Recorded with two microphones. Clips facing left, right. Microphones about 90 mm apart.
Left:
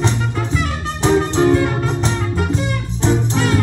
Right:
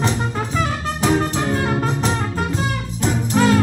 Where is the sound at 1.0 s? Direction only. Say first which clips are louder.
Left 5 dB; 30° left (ahead or behind).